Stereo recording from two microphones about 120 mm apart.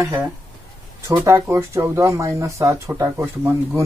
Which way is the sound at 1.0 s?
20° right (ahead or behind).